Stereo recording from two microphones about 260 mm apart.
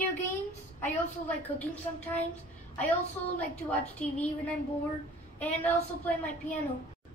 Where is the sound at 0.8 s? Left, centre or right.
Centre.